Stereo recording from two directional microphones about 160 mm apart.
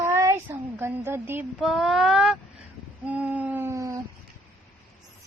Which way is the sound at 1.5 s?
Centre (ahead or behind).